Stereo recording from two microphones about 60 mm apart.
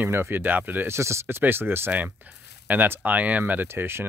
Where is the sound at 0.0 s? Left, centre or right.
Right.